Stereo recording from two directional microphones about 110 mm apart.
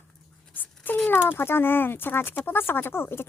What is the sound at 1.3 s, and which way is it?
Speech, 20° left (ahead or behind).